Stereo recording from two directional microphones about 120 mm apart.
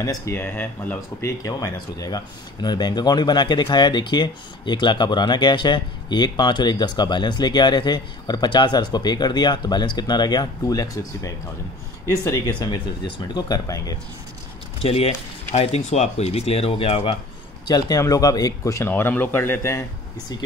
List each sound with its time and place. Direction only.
0.0 s speech: 25° left (ahead or behind)
1.4 s speech: 30° left (ahead or behind)
14.8 s speech: 55° left (ahead or behind)
17.6 s speech: 35° left (ahead or behind)